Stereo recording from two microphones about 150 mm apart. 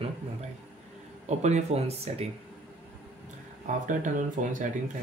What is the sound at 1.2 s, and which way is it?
Speech, 50° right (ahead or behind).